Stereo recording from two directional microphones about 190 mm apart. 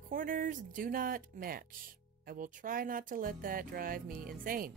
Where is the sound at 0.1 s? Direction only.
45° right (ahead or behind).